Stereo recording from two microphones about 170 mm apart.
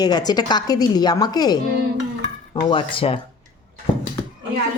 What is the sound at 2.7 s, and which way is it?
Speech, 30° left (ahead or behind).